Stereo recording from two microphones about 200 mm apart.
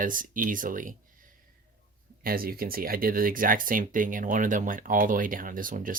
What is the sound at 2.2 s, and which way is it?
Speech, 45° right (ahead or behind).